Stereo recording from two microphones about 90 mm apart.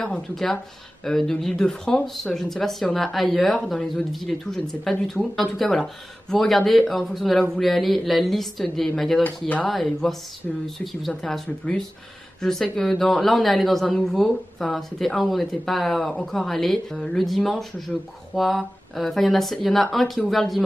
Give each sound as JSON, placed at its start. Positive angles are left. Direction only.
{"t": 0.0, "sound": "a woman's voice", "side_deg": 5}
{"t": 9.2, "sound": "speech", "side_deg": 15}
{"t": 9.7, "sound": "a woman's voice", "side_deg": 0}